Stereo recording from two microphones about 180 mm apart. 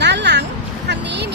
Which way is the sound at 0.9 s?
70° right (ahead or behind).